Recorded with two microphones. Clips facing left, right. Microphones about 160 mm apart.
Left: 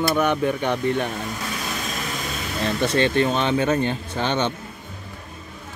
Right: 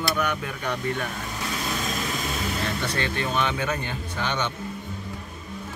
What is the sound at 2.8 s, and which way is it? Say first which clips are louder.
Speech: left 8 dB; 25° left (ahead or behind).